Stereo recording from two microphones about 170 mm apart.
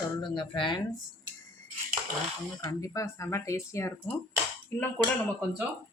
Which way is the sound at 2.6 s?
20° left (ahead or behind).